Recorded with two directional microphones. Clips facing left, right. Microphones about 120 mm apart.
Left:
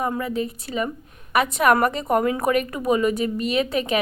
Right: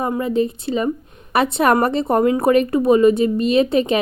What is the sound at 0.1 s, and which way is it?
A woman's voice, 25° right (ahead or behind).